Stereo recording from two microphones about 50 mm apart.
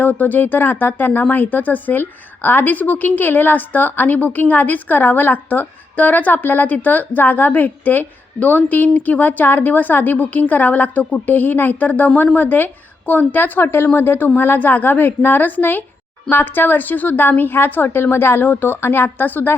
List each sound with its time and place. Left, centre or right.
0.0 s a woman's voice: left